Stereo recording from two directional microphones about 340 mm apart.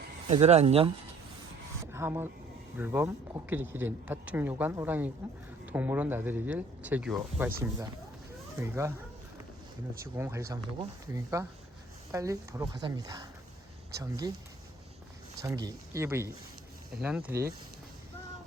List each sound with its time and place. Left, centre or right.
0.3 s speech: centre
1.8 s a sound: centre
2.7 s speech: centre
10.0 s speech: centre
15.4 s speech: centre